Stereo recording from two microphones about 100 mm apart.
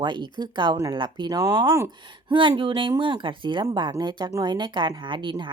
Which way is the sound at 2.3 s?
55° right (ahead or behind).